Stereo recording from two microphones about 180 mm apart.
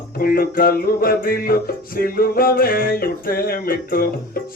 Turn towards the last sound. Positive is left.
turn(degrees=55)  # may be behind; listen again after turning